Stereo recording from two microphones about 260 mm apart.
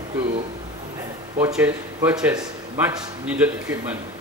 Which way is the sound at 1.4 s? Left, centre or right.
Centre.